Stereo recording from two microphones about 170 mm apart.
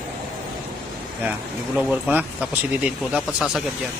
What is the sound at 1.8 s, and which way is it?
Speech, 5° right (ahead or behind).